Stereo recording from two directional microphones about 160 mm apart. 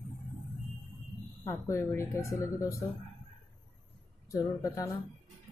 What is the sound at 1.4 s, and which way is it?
Speech, 15° left (ahead or behind).